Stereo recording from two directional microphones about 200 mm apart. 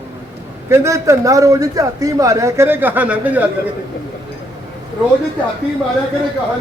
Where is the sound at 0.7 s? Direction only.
15° right (ahead or behind).